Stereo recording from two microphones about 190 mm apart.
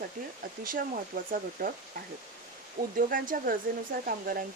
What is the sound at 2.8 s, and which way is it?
Speech, 40° right (ahead or behind).